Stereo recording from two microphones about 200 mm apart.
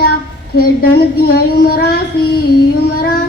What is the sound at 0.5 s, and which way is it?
Speech, 50° left (ahead or behind).